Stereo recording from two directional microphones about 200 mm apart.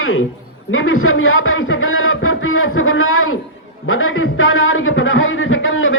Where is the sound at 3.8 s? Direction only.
90° left.